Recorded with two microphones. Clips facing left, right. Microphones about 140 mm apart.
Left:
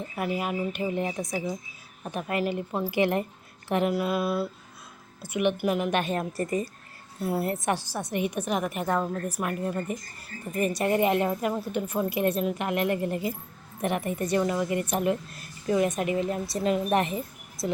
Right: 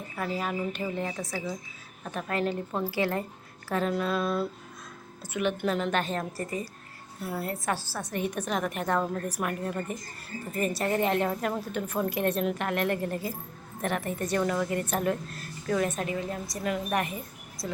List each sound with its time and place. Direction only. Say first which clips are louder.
0.2 s speech: left 2 dB; 10° left (ahead or behind)
3.9 s speech: left 1 dB; 10° left (ahead or behind)
7.2 s a woman's voice: left 5 dB; 25° left (ahead or behind); by 9.8 s centre (ahead or behind)
10.8 s speech: left 3 dB; 10° left (ahead or behind)
16.1 s speech: left 5 dB; 25° left (ahead or behind)